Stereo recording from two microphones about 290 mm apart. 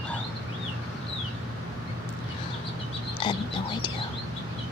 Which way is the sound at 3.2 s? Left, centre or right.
Centre.